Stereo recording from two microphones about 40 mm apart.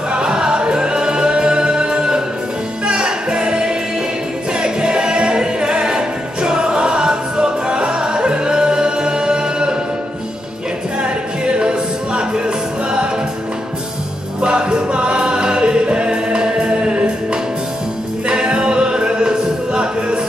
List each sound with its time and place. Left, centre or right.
0.1 s music: centre
11.0 s music: right
14.4 s music: right